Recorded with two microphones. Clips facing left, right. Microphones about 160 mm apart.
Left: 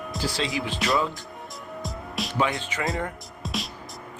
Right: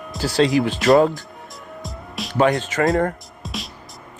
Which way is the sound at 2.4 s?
45° right (ahead or behind).